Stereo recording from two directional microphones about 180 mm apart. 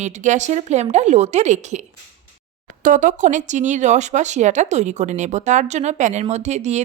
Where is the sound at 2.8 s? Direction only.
45° right (ahead or behind).